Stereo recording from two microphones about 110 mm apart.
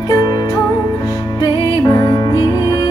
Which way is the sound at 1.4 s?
30° left (ahead or behind).